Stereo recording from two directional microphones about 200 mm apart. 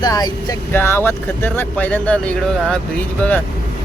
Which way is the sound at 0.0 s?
20° left (ahead or behind).